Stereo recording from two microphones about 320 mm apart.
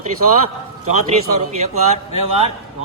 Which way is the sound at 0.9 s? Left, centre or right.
Right.